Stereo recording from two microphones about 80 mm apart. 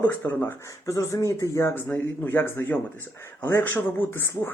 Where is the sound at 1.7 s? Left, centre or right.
Left.